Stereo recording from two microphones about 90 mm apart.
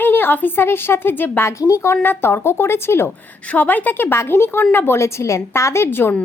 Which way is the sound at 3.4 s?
15° left (ahead or behind).